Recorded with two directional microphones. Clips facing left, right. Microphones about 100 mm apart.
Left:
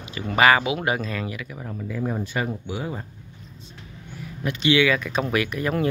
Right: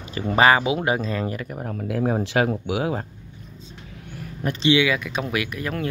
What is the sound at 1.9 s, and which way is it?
Speech, 65° right (ahead or behind).